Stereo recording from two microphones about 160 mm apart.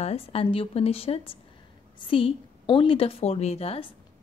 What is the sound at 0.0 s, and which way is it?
A woman's voice, 40° left (ahead or behind).